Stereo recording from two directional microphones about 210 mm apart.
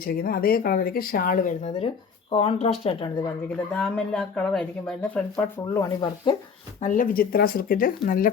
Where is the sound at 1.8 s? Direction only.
25° left (ahead or behind).